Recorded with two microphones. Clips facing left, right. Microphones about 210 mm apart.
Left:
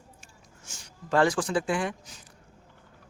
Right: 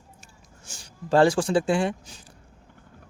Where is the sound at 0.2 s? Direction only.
35° right (ahead or behind).